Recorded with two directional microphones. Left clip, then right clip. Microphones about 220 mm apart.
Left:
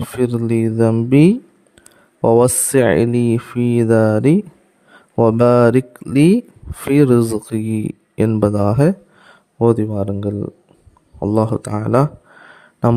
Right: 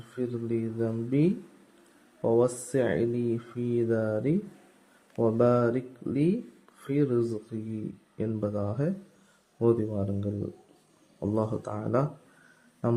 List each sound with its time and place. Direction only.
0.2 s speech: 55° left (ahead or behind)